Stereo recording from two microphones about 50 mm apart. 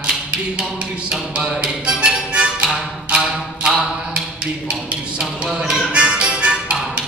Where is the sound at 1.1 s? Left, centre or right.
Centre.